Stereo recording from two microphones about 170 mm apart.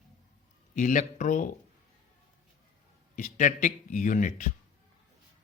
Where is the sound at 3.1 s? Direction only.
45° left (ahead or behind).